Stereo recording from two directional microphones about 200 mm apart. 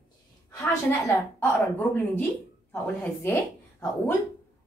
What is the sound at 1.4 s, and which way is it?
A woman's voice, 10° left (ahead or behind).